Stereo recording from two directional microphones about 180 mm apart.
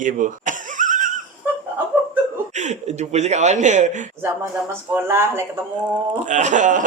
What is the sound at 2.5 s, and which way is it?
Speech, 40° right (ahead or behind).